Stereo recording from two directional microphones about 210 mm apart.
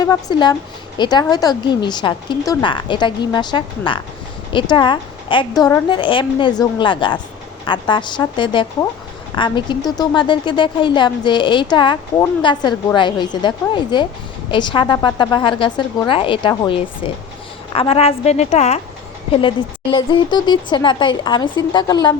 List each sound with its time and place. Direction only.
0.0 s a woman's voice: 20° left (ahead or behind)